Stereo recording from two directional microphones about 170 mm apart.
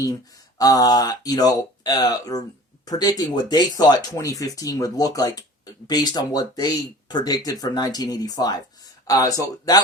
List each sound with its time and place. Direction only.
0.6 s speech: 20° left (ahead or behind)